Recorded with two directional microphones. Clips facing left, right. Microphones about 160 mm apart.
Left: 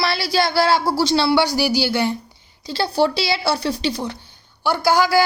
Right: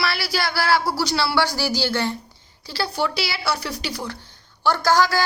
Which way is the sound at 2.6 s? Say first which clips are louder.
Left 6 dB; 25° left (ahead or behind).